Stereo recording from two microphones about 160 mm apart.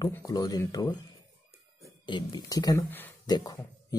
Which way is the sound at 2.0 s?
25° left (ahead or behind).